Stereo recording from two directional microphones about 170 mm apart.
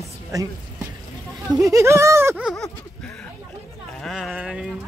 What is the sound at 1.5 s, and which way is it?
Speech, 20° right (ahead or behind).